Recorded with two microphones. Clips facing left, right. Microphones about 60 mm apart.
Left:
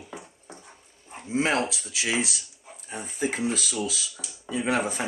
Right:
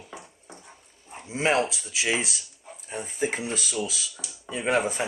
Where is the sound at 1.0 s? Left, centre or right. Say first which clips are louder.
Left 7 dB; centre.